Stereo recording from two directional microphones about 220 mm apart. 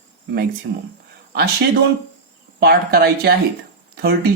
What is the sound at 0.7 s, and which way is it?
Speech, 50° right (ahead or behind).